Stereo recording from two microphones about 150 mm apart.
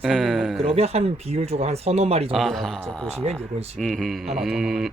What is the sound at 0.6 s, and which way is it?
Speech, 40° right (ahead or behind).